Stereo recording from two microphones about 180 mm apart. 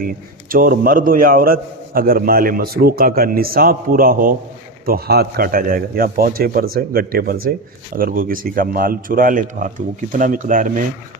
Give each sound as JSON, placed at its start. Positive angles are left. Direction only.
{"t": 0.0, "sound": "a man's voice", "side_deg": -50}